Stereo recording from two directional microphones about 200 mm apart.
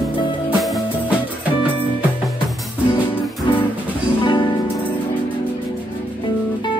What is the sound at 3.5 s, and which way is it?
Music, 25° left (ahead or behind).